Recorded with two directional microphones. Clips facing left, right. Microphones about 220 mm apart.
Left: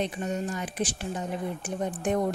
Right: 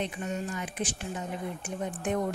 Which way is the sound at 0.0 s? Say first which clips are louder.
Left 3 dB; 35° left (ahead or behind).